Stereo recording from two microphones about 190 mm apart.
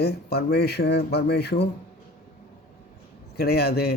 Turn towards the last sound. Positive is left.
turn(degrees=55)  # may be behind; listen again after turning